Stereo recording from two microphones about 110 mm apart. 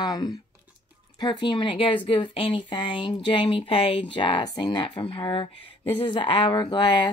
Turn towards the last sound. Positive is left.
turn(degrees=45)  # may be behind; listen again after turning